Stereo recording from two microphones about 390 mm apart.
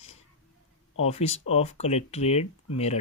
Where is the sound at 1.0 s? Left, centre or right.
Centre.